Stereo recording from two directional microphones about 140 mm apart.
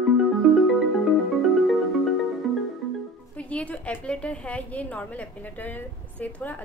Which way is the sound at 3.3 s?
10° left (ahead or behind).